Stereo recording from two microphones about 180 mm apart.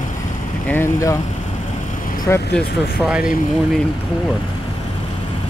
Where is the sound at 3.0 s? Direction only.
5° right (ahead or behind).